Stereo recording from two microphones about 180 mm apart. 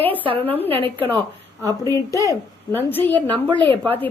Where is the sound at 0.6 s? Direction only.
30° right (ahead or behind).